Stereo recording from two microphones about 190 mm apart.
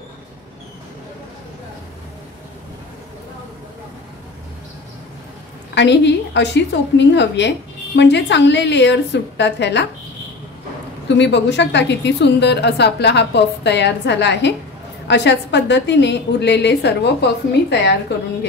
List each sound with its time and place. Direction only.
5.8 s a woman's voice: 65° left (ahead or behind)
11.1 s a woman's voice: 65° left (ahead or behind)